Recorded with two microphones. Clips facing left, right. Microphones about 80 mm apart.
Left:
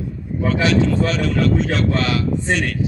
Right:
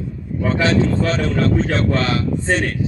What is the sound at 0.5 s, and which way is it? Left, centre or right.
A man's voice, right.